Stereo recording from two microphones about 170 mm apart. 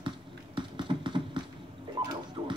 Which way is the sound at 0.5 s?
30° right (ahead or behind).